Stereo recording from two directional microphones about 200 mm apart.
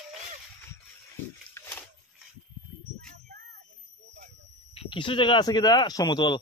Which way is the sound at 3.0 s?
50° right (ahead or behind).